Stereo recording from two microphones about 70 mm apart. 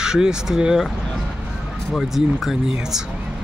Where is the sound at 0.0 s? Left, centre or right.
Centre.